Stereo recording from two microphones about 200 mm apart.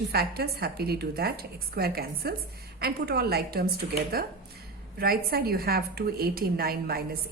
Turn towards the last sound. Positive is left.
turn(degrees=-50)  # may be behind; listen again after turning